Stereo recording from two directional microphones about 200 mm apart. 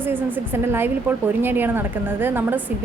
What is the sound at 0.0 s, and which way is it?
A woman's voice, 10° right (ahead or behind).